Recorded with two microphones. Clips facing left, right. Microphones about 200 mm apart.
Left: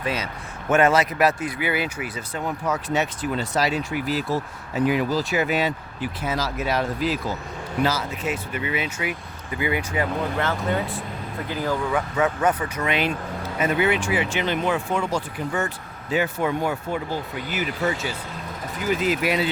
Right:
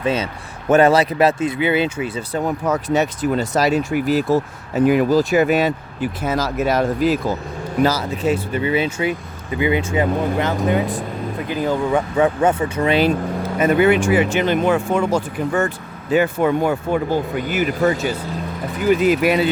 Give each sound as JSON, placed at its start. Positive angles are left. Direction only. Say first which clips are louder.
{"t": 0.0, "sound": "speech", "louder": "right 7 dB", "side_deg": -25}
{"t": 2.6, "sound": "speech", "louder": "right 4 dB", "side_deg": -40}
{"t": 13.6, "sound": "speech", "louder": "right 7 dB", "side_deg": -50}